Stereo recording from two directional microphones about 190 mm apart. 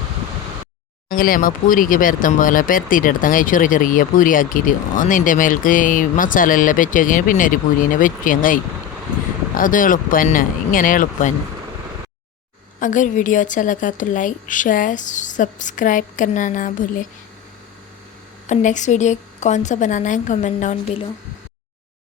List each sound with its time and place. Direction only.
1.1 s speech: 50° left (ahead or behind)
12.8 s speech: 40° left (ahead or behind)
18.4 s a woman's voice: 40° left (ahead or behind)